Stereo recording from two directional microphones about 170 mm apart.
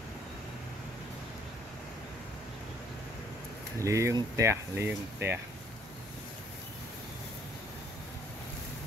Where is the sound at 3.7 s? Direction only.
20° right (ahead or behind).